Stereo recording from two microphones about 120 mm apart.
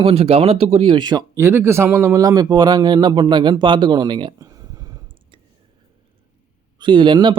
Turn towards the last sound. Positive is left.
turn(degrees=-40)  # may be behind; listen again after turning